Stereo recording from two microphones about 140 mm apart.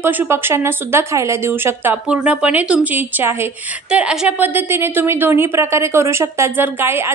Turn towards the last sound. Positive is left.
turn(degrees=-15)  # may be behind; listen again after turning